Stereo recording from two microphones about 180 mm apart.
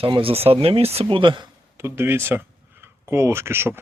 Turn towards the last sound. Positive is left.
turn(degrees=-15)  # may be behind; listen again after turning